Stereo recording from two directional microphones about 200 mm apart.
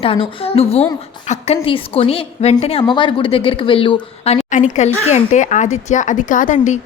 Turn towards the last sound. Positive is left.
turn(degrees=40)  # may be behind; listen again after turning